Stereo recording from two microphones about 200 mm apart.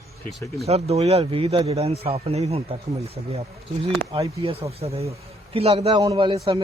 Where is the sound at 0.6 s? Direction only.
30° right (ahead or behind).